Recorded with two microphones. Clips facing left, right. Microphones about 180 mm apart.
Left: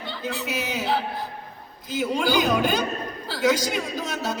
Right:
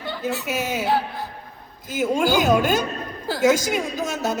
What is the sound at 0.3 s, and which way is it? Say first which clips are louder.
Speech: right 3 dB; 45° right (ahead or behind).